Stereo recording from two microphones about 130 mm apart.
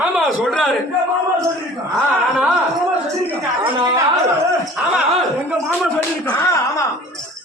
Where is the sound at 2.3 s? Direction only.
5° right (ahead or behind).